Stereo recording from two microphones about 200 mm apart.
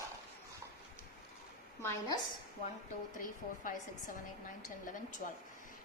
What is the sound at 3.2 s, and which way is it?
A woman's voice, 40° left (ahead or behind).